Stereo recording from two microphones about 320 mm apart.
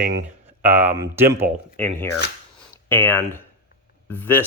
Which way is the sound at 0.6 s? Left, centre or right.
Centre.